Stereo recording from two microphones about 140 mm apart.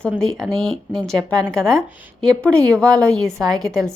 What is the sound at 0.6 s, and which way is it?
Speech, 30° right (ahead or behind).